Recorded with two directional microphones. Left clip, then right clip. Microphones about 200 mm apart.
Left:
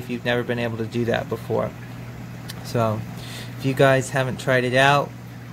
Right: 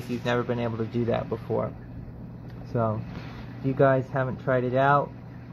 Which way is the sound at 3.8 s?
50° left (ahead or behind).